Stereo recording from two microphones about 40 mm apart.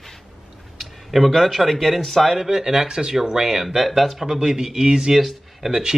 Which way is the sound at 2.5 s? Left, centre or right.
Centre.